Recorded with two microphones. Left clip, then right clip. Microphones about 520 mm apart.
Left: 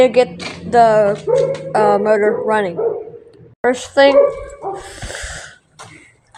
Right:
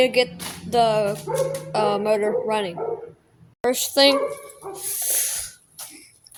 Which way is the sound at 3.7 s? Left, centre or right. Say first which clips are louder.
Left 5 dB; right.